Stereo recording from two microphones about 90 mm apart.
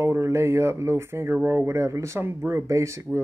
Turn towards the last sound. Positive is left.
turn(degrees=-30)  # may be behind; listen again after turning